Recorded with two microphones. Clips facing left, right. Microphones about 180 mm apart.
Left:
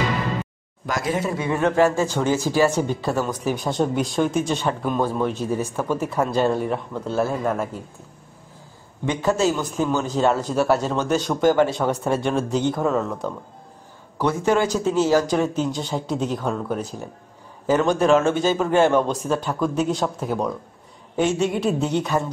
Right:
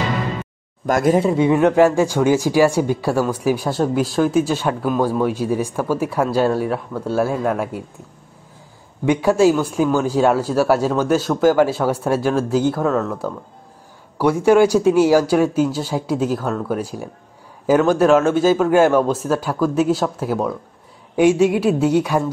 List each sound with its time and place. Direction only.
0.8 s speech: 50° right (ahead or behind)
1.3 s speech: 15° right (ahead or behind)
9.0 s speech: 10° right (ahead or behind)